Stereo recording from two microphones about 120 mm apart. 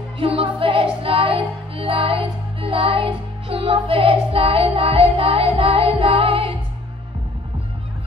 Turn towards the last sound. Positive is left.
turn(degrees=-50)  # may be behind; listen again after turning